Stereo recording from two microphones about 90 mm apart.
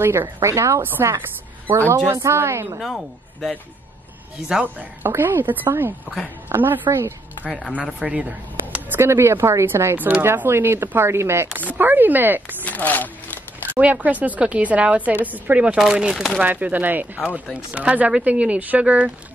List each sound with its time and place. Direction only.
0.0 s a woman's voice: 25° right (ahead or behind)
2.0 s speech: 30° right (ahead or behind)
2.8 s speech: centre (ahead or behind)
5.0 s speech: 25° right (ahead or behind)
7.7 s speech: 15° right (ahead or behind)
12.6 s a sound: 20° left (ahead or behind)
13.7 s speech: 15° right (ahead or behind)
16.4 s speech: 15° right (ahead or behind)